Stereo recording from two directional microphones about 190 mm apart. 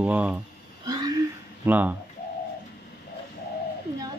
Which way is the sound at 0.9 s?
20° right (ahead or behind).